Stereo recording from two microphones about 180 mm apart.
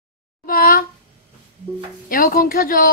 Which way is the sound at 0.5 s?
50° left (ahead or behind).